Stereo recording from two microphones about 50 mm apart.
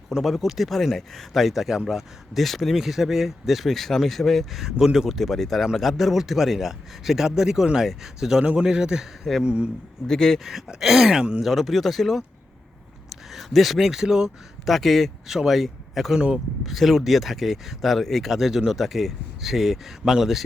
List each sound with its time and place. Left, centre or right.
0.1 s speech: centre
8.4 s speech: centre
10.1 s speech: centre
10.7 s speech: centre
11.2 s speech: centre
11.4 s speech: centre
14.7 s speech: centre
16.1 s speech: centre
16.6 s speech: centre